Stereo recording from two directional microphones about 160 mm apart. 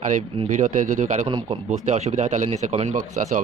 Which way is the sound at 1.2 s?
30° right (ahead or behind).